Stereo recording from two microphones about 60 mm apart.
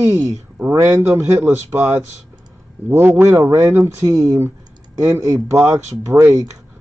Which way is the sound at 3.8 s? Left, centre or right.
Right.